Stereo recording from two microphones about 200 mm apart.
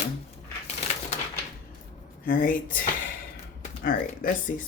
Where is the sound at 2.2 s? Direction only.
45° left (ahead or behind).